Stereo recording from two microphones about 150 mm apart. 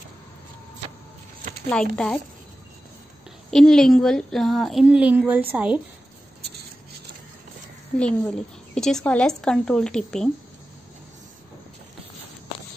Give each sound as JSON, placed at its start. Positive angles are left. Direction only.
{"t": 1.7, "sound": "speech", "side_deg": 5}
{"t": 3.4, "sound": "a woman's voice", "side_deg": 5}
{"t": 8.0, "sound": "a woman's voice", "side_deg": 5}